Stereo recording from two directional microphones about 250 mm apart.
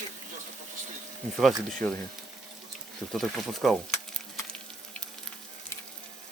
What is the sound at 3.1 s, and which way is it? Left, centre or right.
Speech, centre.